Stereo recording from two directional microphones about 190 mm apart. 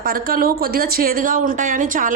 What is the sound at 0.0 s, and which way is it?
Speech, 50° right (ahead or behind).